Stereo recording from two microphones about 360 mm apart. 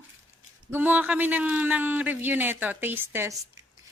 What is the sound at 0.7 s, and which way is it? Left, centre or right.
A child's voice, centre.